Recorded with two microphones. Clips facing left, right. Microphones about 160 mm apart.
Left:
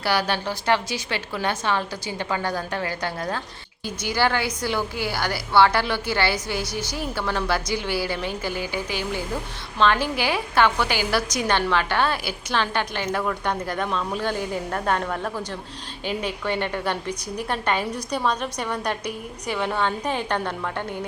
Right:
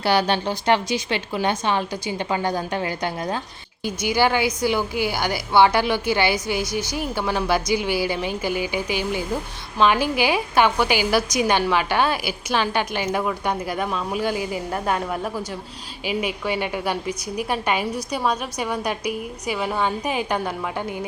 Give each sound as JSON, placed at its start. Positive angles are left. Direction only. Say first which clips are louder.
{"t": 0.0, "sound": "a woman's voice", "louder": "right 4 dB", "side_deg": -20}